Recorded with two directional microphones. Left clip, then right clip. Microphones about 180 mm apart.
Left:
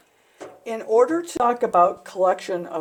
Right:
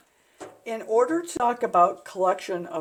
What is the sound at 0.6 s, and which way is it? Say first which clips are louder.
Speech: left 4 dB; 25° left (ahead or behind).